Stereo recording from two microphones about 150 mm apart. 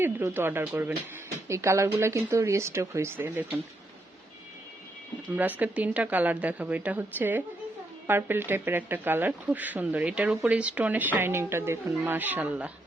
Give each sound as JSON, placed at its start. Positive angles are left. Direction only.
{"t": 0.0, "sound": "speech", "side_deg": -15}
{"t": 5.4, "sound": "speech", "side_deg": -10}